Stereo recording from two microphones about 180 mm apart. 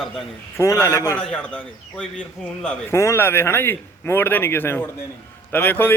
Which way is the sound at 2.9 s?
15° left (ahead or behind).